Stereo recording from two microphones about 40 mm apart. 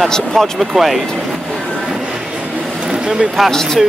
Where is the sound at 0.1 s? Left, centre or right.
Centre.